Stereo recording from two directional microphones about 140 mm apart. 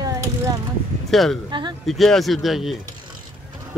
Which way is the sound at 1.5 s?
35° right (ahead or behind).